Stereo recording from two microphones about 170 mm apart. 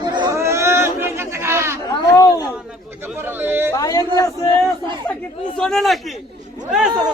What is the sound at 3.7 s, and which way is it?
Speech, 20° left (ahead or behind).